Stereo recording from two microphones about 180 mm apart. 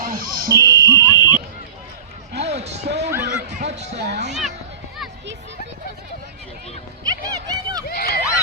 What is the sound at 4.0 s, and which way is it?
Speech, 70° right (ahead or behind).